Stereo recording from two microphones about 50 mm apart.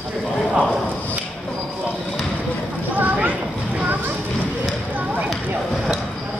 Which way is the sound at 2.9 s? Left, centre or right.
Right.